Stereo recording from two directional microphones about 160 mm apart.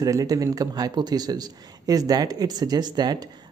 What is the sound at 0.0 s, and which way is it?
Speech, 20° right (ahead or behind).